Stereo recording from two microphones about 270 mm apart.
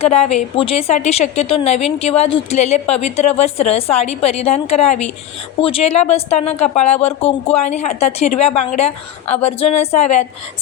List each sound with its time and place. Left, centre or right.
0.0 s a woman's voice: left